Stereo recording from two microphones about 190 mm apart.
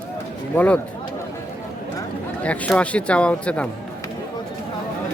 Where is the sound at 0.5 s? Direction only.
10° left (ahead or behind).